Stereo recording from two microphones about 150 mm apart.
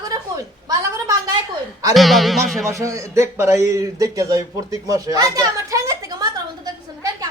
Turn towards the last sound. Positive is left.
turn(degrees=-25)  # may be behind; listen again after turning